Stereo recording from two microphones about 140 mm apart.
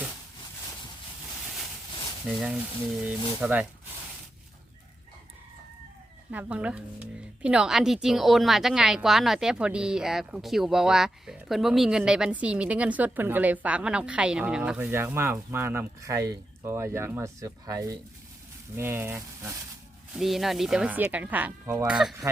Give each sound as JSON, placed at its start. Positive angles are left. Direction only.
{"t": 2.2, "sound": "a woman's voice", "side_deg": 0}
{"t": 6.3, "sound": "a woman's voice", "side_deg": -10}
{"t": 20.1, "sound": "a woman's voice", "side_deg": 0}
{"t": 21.8, "sound": "speech", "side_deg": -5}